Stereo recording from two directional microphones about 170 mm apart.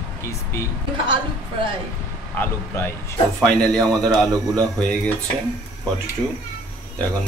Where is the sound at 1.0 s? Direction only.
25° right (ahead or behind).